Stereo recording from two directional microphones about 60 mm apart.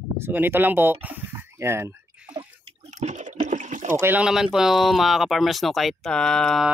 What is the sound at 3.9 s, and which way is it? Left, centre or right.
Speech, right.